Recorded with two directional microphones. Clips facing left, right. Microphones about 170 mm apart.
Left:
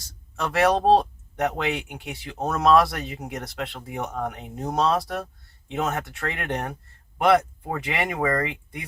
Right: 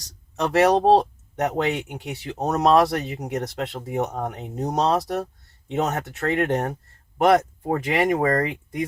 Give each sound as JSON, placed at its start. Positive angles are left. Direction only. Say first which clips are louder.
{"t": 0.3, "sound": "speech", "louder": "right 3 dB", "side_deg": -40}